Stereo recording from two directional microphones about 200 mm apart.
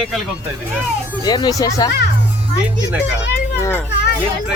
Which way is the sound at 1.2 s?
20° left (ahead or behind).